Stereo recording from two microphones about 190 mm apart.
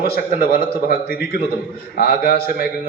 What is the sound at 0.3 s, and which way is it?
A man's voice, 50° left (ahead or behind).